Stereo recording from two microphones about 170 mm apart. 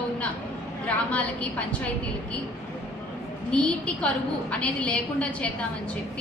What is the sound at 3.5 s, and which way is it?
A woman's voice, 5° left (ahead or behind).